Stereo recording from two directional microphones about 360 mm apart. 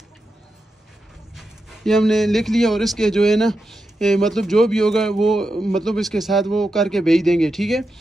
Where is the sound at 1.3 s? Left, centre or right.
Centre.